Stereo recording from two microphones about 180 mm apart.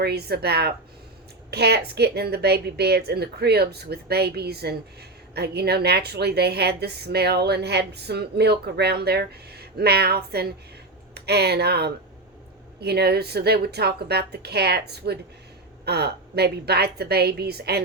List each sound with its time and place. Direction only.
0.0 s a woman's voice: 65° right (ahead or behind)